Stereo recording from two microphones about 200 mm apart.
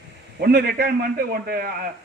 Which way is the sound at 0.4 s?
50° right (ahead or behind).